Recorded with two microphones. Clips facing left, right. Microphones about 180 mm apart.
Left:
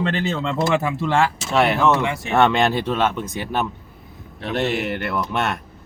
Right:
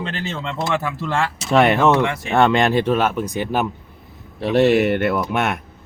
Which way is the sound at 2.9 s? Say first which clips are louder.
Right 3 dB; 10° right (ahead or behind).